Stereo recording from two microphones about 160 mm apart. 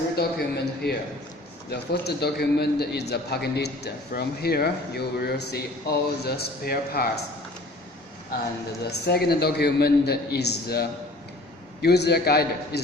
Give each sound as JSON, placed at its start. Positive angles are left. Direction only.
{"t": 0.2, "sound": "a man's voice", "side_deg": 85}
{"t": 8.9, "sound": "a man's voice", "side_deg": 85}